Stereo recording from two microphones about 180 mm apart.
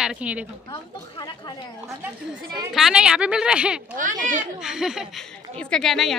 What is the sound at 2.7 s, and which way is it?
A woman's voice, 5° right (ahead or behind).